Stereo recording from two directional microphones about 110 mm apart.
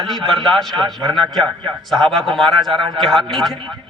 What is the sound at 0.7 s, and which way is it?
Speech, 45° right (ahead or behind).